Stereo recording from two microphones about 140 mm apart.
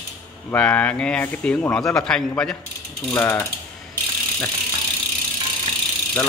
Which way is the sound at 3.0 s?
15° left (ahead or behind).